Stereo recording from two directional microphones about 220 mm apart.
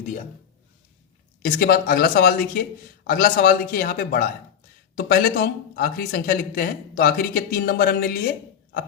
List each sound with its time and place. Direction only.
1.4 s speech: 40° left (ahead or behind)